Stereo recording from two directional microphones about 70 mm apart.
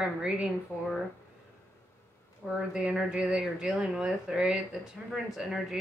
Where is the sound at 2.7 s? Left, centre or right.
Centre.